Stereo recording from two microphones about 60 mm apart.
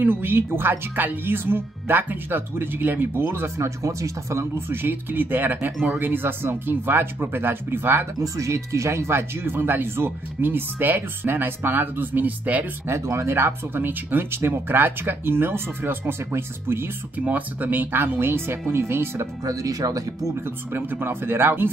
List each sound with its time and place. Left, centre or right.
0.0 s speech: right
8.2 s speech: right
12.8 s speech: right
17.2 s speech: right
19.4 s speech: right
20.4 s speech: right